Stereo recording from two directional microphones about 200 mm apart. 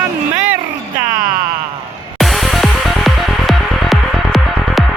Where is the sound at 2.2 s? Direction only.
Centre (ahead or behind).